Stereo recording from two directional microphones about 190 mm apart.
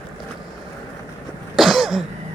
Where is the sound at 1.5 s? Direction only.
Centre (ahead or behind).